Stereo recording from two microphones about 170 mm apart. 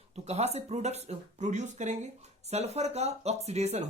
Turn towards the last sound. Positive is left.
turn(degrees=-40)  # may be behind; listen again after turning